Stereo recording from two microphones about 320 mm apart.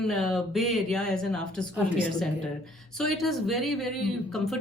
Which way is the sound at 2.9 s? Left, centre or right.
Centre.